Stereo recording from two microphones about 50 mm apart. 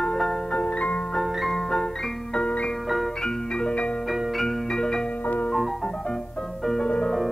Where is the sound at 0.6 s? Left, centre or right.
Left.